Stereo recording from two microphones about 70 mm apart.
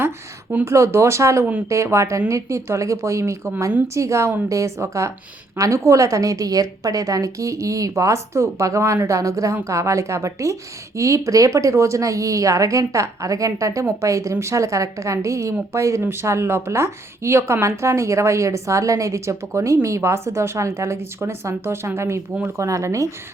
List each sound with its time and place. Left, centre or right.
0.6 s speech: right